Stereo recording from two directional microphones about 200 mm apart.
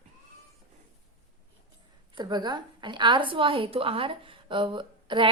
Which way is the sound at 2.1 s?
20° right (ahead or behind).